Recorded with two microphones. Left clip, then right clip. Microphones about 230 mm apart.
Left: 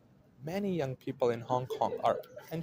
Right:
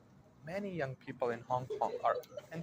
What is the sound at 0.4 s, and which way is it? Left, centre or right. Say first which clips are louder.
Speech: left 5 dB; left.